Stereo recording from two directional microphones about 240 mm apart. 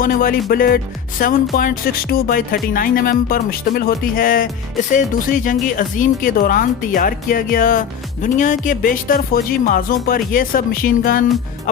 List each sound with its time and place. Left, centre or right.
0.0 s speech: left